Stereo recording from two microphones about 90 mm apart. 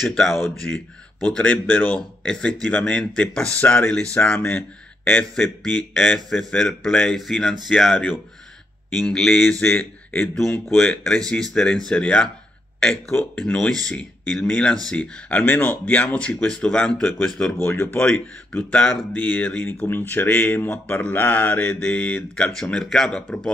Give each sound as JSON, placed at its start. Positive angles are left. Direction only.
{"t": 0.0, "sound": "speech", "side_deg": 0}
{"t": 1.3, "sound": "speech", "side_deg": 15}
{"t": 4.4, "sound": "speech", "side_deg": 25}
{"t": 5.3, "sound": "speech", "side_deg": 5}
{"t": 10.3, "sound": "speech", "side_deg": 5}
{"t": 13.4, "sound": "speech", "side_deg": 5}
{"t": 17.6, "sound": "speech", "side_deg": 25}
{"t": 17.9, "sound": "speech", "side_deg": 10}